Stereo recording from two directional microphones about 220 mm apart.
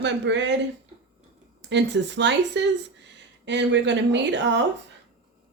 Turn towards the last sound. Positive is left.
turn(degrees=-55)  # may be behind; listen again after turning